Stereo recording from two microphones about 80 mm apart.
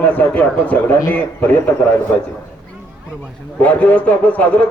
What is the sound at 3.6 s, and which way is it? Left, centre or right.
A man's voice, centre.